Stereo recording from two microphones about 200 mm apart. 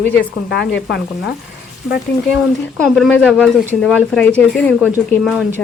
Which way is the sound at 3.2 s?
5° left (ahead or behind).